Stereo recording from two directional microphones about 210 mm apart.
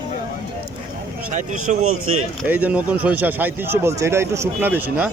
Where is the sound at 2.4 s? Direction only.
5° right (ahead or behind).